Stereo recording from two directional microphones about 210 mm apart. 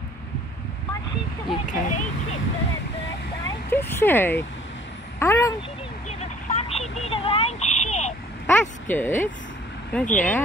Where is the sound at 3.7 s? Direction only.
10° left (ahead or behind).